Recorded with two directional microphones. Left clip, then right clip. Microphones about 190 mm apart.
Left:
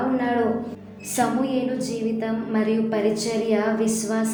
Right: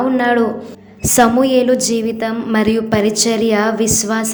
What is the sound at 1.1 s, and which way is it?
A woman's voice, 45° right (ahead or behind).